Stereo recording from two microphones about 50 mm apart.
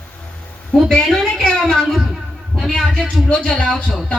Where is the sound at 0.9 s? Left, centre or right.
Centre.